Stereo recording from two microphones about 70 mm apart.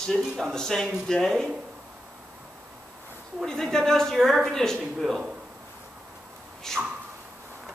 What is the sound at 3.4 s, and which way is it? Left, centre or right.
Speech, centre.